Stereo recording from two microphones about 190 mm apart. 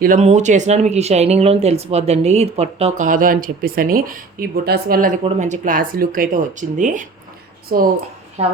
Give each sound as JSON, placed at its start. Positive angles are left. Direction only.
{"t": 0.0, "sound": "speech", "side_deg": -40}
{"t": 8.4, "sound": "speech", "side_deg": -30}